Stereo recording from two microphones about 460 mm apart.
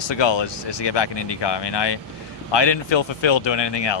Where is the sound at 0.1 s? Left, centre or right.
Left.